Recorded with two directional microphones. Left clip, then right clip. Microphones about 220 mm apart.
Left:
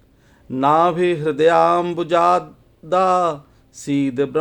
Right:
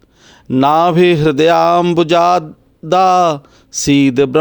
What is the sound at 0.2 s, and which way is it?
Speech, 40° right (ahead or behind).